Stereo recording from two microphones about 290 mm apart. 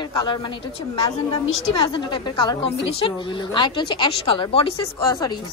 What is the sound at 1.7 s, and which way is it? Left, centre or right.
A woman's voice, centre.